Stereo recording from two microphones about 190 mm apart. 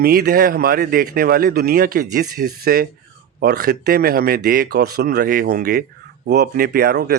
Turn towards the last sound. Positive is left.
turn(degrees=-60)  # may be behind; listen again after turning